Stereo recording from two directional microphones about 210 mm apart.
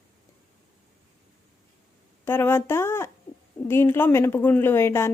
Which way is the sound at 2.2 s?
10° left (ahead or behind).